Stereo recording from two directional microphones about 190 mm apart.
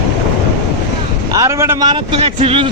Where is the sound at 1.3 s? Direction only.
15° right (ahead or behind).